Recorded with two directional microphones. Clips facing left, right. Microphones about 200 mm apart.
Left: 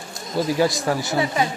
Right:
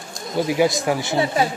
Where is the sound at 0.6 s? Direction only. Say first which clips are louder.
Right 3 dB; 20° right (ahead or behind).